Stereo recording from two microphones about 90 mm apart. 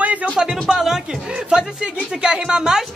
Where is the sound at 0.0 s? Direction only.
15° right (ahead or behind).